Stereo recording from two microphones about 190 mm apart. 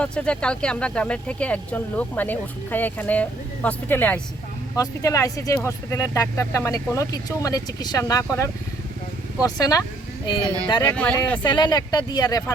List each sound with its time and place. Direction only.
0.0 s speech: 5° left (ahead or behind)
10.4 s speech: 20° right (ahead or behind)
10.8 s speech: 5° left (ahead or behind)
11.4 s speech: 25° left (ahead or behind)